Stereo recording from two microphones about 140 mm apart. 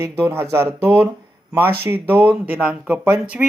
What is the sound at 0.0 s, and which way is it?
Speech, 15° right (ahead or behind).